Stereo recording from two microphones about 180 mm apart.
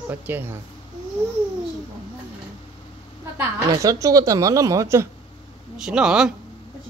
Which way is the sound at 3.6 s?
20° right (ahead or behind).